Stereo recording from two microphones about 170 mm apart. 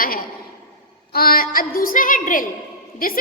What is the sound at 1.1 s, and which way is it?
A woman's voice, 60° left (ahead or behind).